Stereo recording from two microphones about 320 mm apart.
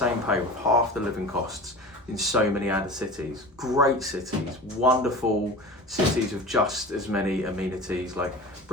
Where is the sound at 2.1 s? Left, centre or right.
Centre.